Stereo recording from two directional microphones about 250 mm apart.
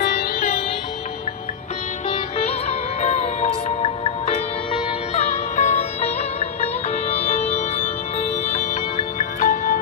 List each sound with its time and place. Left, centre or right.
0.0 s music: left
2.0 s music: left